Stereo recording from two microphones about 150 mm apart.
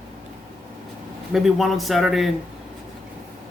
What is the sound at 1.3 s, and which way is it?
A man's voice, centre (ahead or behind).